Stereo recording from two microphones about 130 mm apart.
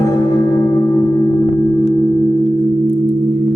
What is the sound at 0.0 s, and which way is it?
Singing bowl, 20° left (ahead or behind).